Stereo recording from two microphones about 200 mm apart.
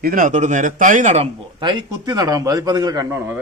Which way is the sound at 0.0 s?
45° right (ahead or behind).